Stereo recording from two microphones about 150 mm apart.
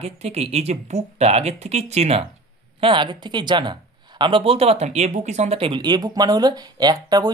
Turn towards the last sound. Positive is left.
turn(degrees=-25)  # may be behind; listen again after turning